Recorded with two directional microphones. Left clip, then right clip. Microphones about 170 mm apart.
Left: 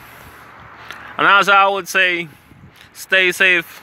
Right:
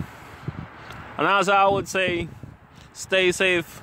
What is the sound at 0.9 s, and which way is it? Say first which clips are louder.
Speech: left 8 dB; 10° right (ahead or behind).